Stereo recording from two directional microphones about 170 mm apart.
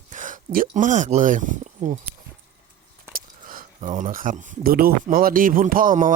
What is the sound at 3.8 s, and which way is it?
Speech, 45° right (ahead or behind).